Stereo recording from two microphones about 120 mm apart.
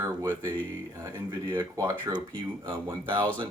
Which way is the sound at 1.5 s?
25° right (ahead or behind).